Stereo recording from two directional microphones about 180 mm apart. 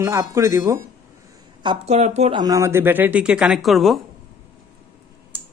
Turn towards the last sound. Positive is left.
turn(degrees=0)  # may be behind; listen again after turning